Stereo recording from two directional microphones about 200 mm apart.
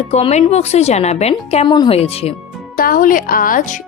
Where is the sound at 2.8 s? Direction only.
45° left (ahead or behind).